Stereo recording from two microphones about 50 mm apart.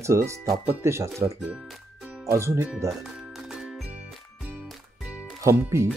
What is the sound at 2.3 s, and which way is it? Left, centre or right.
Speech, right.